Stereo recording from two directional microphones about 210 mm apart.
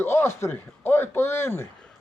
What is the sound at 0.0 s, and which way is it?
Speech, 10° left (ahead or behind).